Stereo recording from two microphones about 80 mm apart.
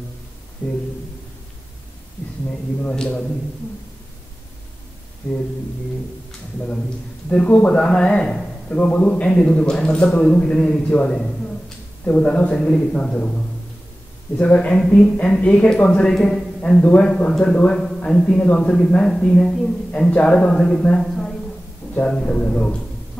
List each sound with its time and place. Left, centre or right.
2.8 s a man's voice: centre
5.2 s speech: left
7.2 s a man's voice: centre
14.4 s a man's voice: centre